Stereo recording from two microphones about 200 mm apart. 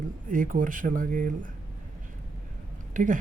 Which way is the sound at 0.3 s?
40° right (ahead or behind).